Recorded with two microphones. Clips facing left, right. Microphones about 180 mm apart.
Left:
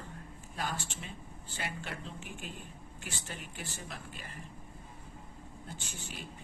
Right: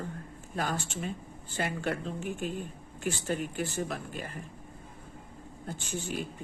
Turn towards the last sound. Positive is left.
turn(degrees=-50)  # may be behind; listen again after turning